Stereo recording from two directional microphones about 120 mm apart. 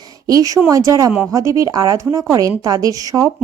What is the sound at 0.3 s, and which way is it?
Speech, 30° right (ahead or behind).